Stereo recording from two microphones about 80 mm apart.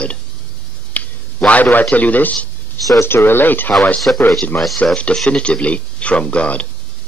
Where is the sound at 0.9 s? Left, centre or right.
Centre.